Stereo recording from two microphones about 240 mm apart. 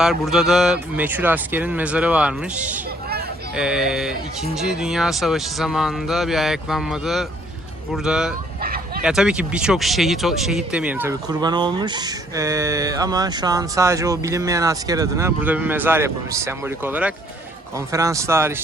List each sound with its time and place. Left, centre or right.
0.0 s speech: centre
3.5 s speech: centre
8.6 s bow-wow: right
9.0 s speech: centre